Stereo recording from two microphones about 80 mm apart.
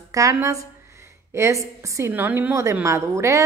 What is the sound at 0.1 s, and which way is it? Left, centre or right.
A woman's voice, right.